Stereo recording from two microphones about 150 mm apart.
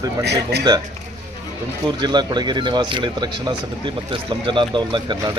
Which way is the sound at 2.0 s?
30° right (ahead or behind).